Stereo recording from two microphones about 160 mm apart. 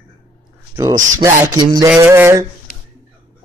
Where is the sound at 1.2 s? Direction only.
20° right (ahead or behind).